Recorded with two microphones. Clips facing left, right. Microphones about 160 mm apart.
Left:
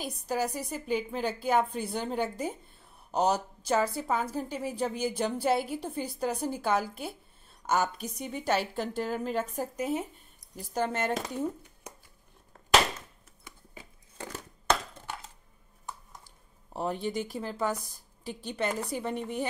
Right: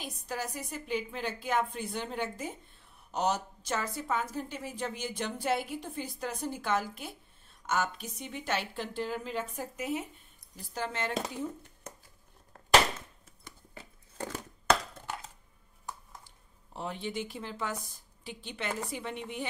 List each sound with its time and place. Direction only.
0.0 s a woman's voice: 35° left (ahead or behind)
10.5 s speech: 50° left (ahead or behind)
16.7 s a woman's voice: 45° left (ahead or behind)